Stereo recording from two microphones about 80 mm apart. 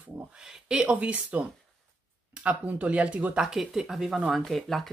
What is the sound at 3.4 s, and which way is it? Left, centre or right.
Speech, centre.